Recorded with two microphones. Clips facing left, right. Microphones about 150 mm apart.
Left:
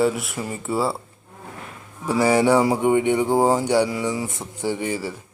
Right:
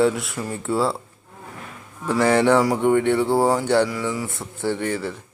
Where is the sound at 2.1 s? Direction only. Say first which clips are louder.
Even; 10° left (ahead or behind).